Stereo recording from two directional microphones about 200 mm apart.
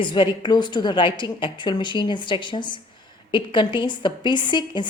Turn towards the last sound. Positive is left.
turn(degrees=20)  # may be behind; listen again after turning